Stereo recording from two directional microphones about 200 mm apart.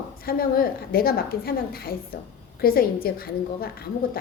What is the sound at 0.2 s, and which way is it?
A woman's voice, 50° left (ahead or behind).